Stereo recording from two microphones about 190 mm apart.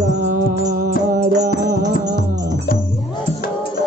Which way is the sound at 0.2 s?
45° right (ahead or behind).